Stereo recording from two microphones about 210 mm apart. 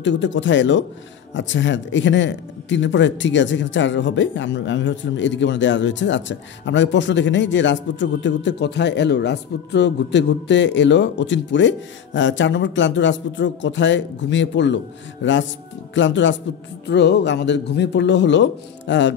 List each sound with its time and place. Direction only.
0.0 s a man's voice: 60° left (ahead or behind)